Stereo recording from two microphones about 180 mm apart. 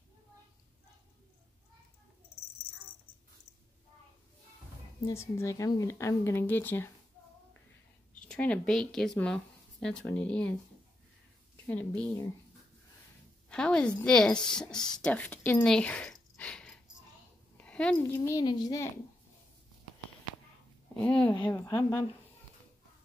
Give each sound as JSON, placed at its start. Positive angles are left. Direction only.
{"t": 5.0, "sound": "speech", "side_deg": 15}
{"t": 8.2, "sound": "speech", "side_deg": 5}
{"t": 11.6, "sound": "speech", "side_deg": 10}
{"t": 13.5, "sound": "a woman's voice", "side_deg": 5}
{"t": 18.2, "sound": "a child's voice", "side_deg": 20}
{"t": 20.9, "sound": "a woman's voice", "side_deg": 5}
{"t": 21.4, "sound": "a child's voice", "side_deg": 20}